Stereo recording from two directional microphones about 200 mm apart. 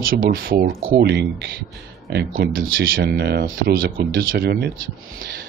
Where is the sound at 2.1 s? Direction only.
55° right (ahead or behind).